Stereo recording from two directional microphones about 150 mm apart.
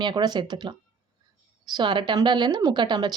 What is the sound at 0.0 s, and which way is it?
A woman's voice, 30° right (ahead or behind).